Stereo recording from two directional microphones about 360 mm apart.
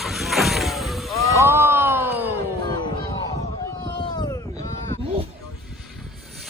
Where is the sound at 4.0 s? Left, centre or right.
Centre.